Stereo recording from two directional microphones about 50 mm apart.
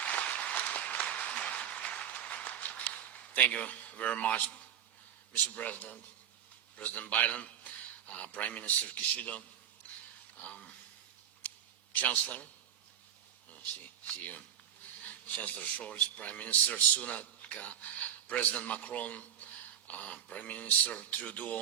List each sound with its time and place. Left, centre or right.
0.0 s applause: left
5.3 s a man's voice: left
9.8 s a sound: left
11.9 s a man's voice: left
13.5 s a man's voice: left